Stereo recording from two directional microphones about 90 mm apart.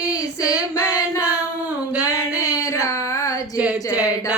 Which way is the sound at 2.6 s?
35° left (ahead or behind).